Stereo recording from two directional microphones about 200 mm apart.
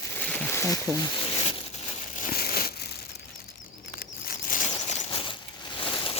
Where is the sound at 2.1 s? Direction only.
45° left (ahead or behind).